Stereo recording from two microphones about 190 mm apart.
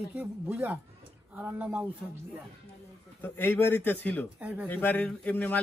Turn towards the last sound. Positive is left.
turn(degrees=10)  # may be behind; listen again after turning